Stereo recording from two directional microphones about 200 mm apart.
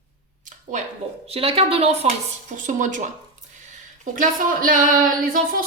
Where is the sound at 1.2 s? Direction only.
30° right (ahead or behind).